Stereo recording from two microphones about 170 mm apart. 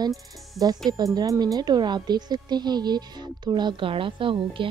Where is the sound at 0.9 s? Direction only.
20° right (ahead or behind).